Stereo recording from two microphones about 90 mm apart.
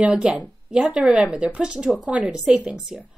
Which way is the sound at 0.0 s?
10° right (ahead or behind).